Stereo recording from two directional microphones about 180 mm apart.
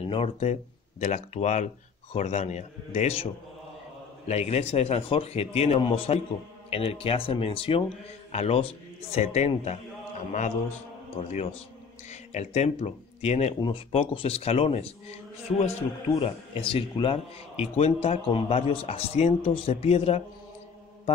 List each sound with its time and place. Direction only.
0.0 s a man's voice: 30° left (ahead or behind)
4.3 s a man's voice: 35° left (ahead or behind)
11.1 s a man's voice: 35° left (ahead or behind)